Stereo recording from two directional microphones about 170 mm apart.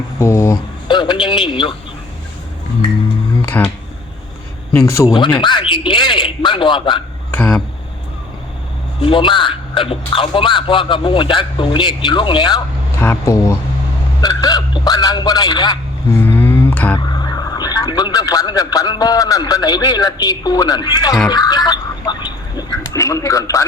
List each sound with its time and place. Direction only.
0.2 s speech: 20° left (ahead or behind)
3.4 s finger snapping: 10° left (ahead or behind)
4.9 s speech: 15° left (ahead or behind)
5.2 s speech: 25° left (ahead or behind)
7.3 s a sound: 10° left (ahead or behind)
9.0 s speech: 30° left (ahead or behind)
13.0 s speech: 15° left (ahead or behind)
14.2 s a sound: 25° left (ahead or behind)
16.1 s a sound: 10° left (ahead or behind)
17.1 s speech: 25° left (ahead or behind)
21.2 s duck: 25° left (ahead or behind)